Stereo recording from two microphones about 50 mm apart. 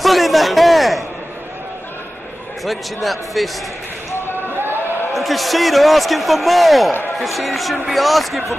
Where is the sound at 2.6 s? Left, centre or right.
Centre.